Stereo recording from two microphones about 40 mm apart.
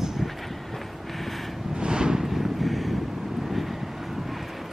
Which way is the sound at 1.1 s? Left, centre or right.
Centre.